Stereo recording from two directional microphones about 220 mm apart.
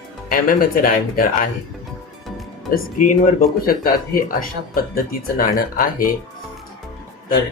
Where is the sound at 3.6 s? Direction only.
40° left (ahead or behind).